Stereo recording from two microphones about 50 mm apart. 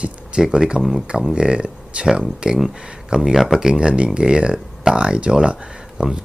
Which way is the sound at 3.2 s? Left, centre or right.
Centre.